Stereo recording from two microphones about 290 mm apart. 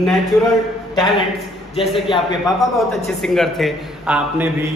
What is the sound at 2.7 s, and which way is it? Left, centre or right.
A man's voice, centre.